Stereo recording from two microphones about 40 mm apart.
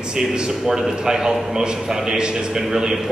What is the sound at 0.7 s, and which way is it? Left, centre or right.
A man's voice, centre.